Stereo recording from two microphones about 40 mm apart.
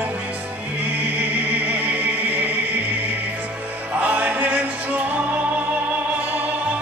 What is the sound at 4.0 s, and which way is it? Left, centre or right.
Music, right.